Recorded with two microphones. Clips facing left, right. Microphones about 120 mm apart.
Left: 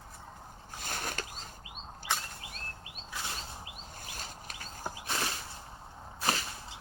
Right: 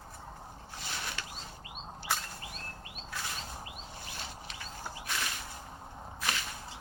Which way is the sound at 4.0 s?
45° left (ahead or behind).